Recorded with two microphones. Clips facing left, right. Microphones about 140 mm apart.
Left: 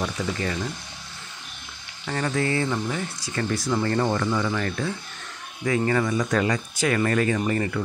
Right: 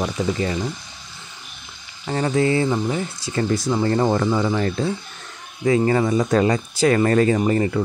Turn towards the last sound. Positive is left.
turn(degrees=-25)  # may be behind; listen again after turning